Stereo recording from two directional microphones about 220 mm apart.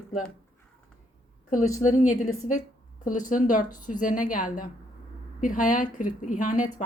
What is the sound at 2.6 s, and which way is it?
A woman's voice, 35° left (ahead or behind).